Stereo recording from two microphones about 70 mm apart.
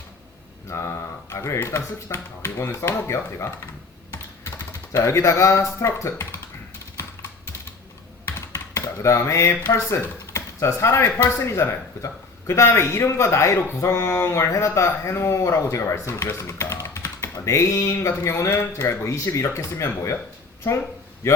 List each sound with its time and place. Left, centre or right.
0.7 s a sound: left
1.5 s speech: left
4.9 s speech: left
8.3 s speech: left
21.2 s speech: left